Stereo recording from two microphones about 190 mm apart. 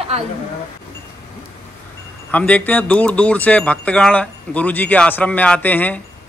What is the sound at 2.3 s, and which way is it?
Speech, 5° left (ahead or behind).